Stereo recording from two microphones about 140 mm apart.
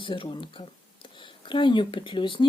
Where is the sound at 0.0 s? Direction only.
35° left (ahead or behind).